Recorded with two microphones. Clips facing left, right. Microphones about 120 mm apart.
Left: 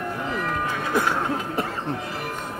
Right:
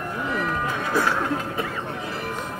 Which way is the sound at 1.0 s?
20° left (ahead or behind).